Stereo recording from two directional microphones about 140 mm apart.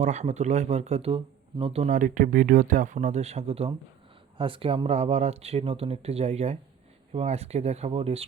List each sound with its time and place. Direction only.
0.0 s speech: 55° right (ahead or behind)
1.9 s speech: 70° right (ahead or behind); by 8.2 s 45° right (ahead or behind)